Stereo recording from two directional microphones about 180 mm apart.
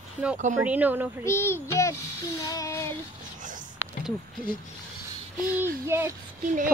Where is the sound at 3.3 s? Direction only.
45° right (ahead or behind).